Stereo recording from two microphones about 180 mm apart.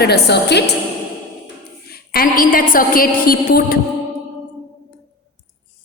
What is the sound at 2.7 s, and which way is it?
A woman's voice, 50° left (ahead or behind).